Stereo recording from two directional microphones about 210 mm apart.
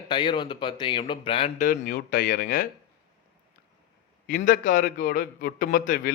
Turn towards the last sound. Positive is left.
turn(degrees=40)  # may be behind; listen again after turning